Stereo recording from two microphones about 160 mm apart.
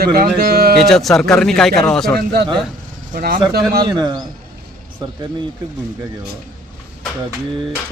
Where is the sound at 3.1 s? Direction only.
65° right (ahead or behind).